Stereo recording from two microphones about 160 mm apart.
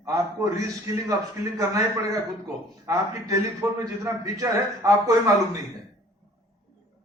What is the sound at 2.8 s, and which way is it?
A man's voice, 20° right (ahead or behind).